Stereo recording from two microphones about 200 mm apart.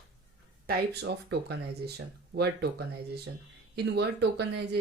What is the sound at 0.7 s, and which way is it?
Speech, 55° right (ahead or behind).